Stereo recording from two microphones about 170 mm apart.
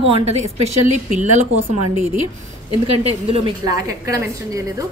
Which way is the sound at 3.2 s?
35° right (ahead or behind).